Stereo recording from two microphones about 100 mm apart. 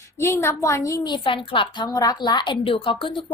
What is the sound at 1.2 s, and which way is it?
Speech, 60° left (ahead or behind).